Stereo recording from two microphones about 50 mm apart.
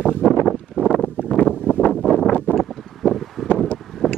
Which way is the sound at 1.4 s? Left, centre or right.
Left.